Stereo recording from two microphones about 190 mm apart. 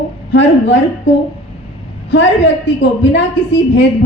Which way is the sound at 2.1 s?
70° left (ahead or behind).